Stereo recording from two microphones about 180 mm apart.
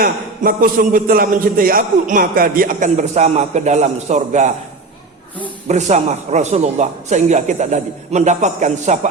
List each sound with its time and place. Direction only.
0.0 s a man's voice: 50° right (ahead or behind)
5.6 s a man's voice: 40° right (ahead or behind)